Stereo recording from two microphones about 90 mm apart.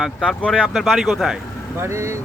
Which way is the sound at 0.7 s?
5° right (ahead or behind).